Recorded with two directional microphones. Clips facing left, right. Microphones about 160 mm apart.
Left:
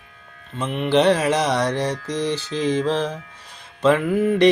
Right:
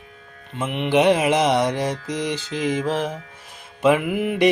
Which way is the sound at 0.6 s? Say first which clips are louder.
Even; 20° right (ahead or behind).